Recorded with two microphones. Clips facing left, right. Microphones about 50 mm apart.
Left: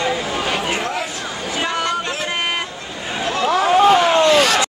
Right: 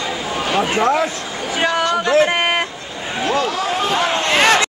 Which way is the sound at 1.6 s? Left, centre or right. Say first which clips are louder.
Right 5 dB; right.